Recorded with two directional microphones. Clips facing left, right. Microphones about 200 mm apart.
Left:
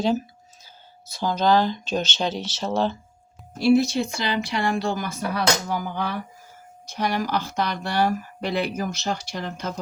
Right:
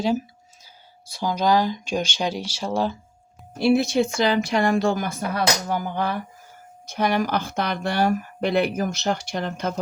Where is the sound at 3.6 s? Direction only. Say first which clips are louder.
Even; 55° right (ahead or behind).